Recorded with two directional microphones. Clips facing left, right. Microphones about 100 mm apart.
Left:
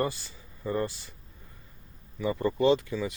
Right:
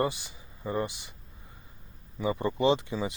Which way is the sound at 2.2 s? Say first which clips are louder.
Left 1 dB; 25° right (ahead or behind).